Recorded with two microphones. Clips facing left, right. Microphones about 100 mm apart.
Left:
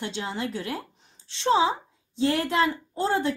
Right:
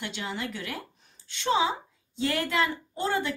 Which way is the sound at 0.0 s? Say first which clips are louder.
Left 3 dB; 30° left (ahead or behind).